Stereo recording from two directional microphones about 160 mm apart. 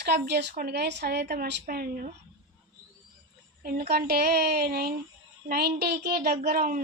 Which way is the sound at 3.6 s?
70° right (ahead or behind).